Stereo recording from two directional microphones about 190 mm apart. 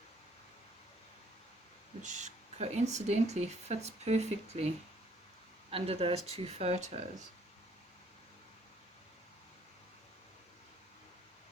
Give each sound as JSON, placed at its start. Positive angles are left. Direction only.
{"t": 2.0, "sound": "speech", "side_deg": -40}
{"t": 5.7, "sound": "speech", "side_deg": -30}